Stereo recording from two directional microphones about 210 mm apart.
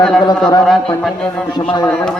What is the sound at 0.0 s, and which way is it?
Speech, 5° left (ahead or behind).